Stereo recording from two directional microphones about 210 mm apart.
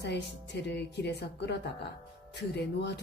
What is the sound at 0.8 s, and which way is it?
A woman's voice, 55° left (ahead or behind).